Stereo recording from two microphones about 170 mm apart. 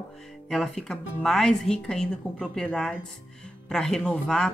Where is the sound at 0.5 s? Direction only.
Centre (ahead or behind).